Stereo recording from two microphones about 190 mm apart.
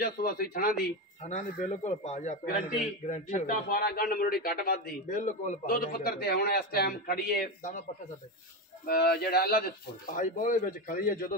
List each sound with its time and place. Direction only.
0.0 s a man's voice: 50° left (ahead or behind)
1.6 s a man's voice: 35° left (ahead or behind)
8.8 s speech: 55° left (ahead or behind)
10.1 s a man's voice: 45° left (ahead or behind)